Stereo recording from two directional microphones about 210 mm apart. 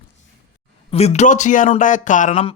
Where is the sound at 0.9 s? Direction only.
30° left (ahead or behind).